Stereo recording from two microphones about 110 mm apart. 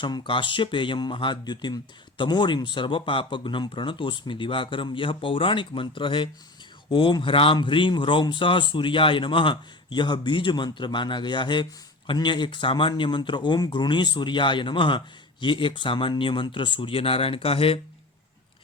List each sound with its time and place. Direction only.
0.0 s speech: 45° left (ahead or behind)